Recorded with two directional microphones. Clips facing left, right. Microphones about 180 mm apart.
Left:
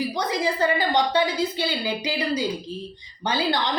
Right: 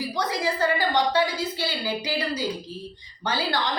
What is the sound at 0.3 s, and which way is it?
A woman's voice, 20° left (ahead or behind).